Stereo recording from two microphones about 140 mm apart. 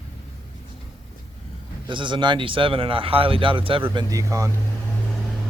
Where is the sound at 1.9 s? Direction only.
35° right (ahead or behind).